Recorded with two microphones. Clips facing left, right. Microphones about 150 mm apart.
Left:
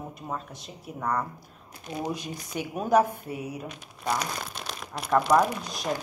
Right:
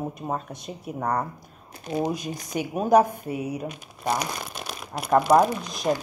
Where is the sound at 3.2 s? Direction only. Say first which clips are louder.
Right 5 dB; 15° right (ahead or behind).